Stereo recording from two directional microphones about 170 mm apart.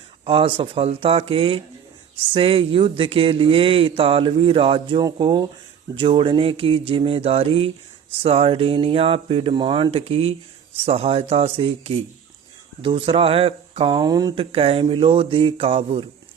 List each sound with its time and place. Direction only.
0.3 s speech: 30° right (ahead or behind)
14.5 s speech: 35° right (ahead or behind)